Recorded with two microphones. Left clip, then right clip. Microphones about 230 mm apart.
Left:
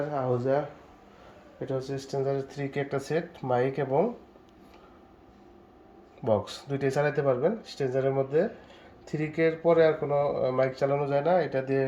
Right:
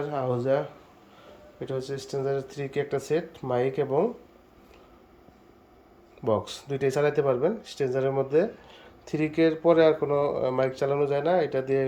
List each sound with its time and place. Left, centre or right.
0.0 s speech: centre
1.6 s speech: centre
6.2 s speech: centre